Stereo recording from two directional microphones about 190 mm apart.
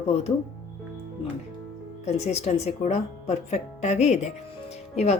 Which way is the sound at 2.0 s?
35° left (ahead or behind).